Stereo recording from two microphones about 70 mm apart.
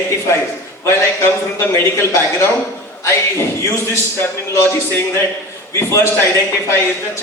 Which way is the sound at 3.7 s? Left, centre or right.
Left.